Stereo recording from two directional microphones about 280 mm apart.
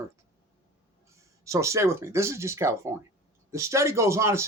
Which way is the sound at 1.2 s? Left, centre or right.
Centre.